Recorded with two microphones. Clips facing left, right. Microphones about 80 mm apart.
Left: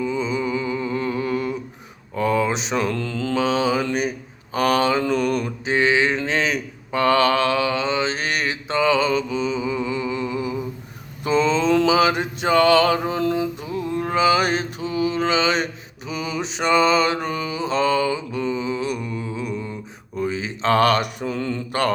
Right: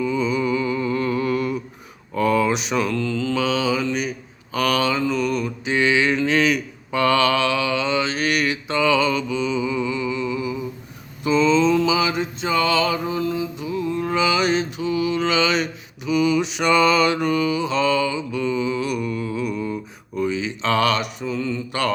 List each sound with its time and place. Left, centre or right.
0.0 s mantra: left
4.5 s mantra: left
5.7 s mantra: left
11.7 s mantra: left
20.1 s mantra: left